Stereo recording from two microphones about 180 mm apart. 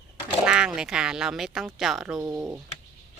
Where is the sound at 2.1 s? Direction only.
20° right (ahead or behind).